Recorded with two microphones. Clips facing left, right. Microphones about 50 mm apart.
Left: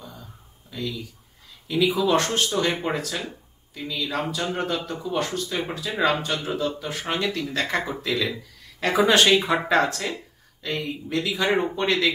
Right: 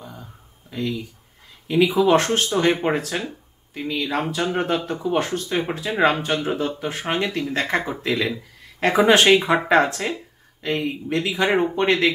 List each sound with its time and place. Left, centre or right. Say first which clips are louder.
0.7 s speech: right 5 dB; right
7.2 s speech: right 2 dB; right